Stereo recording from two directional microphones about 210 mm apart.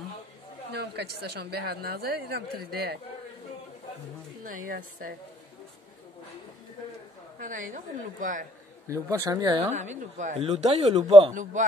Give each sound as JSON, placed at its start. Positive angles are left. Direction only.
{"t": 0.7, "sound": "speech", "side_deg": -50}
{"t": 4.6, "sound": "speech", "side_deg": -40}
{"t": 7.3, "sound": "speech", "side_deg": -40}
{"t": 8.8, "sound": "speech", "side_deg": -15}
{"t": 9.7, "sound": "speech", "side_deg": -35}